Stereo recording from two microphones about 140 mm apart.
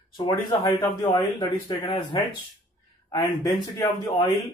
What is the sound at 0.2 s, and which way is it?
Speech, 30° left (ahead or behind).